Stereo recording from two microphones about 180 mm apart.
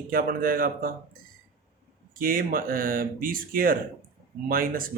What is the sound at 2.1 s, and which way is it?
Speech, 50° right (ahead or behind).